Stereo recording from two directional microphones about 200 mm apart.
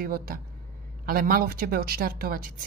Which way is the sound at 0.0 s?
45° right (ahead or behind).